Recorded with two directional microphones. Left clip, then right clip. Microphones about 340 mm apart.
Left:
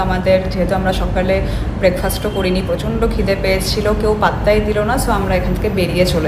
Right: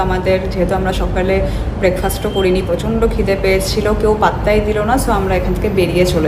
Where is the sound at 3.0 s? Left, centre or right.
Centre.